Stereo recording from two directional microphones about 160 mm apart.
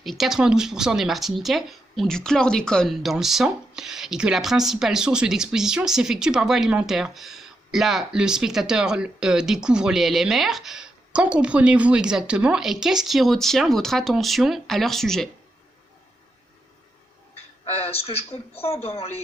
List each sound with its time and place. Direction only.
0.0 s speech: centre (ahead or behind)
17.7 s speech: 40° left (ahead or behind)
18.3 s a woman's voice: 15° left (ahead or behind)